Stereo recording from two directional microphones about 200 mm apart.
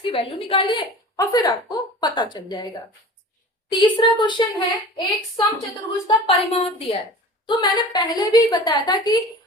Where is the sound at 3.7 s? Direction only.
25° left (ahead or behind).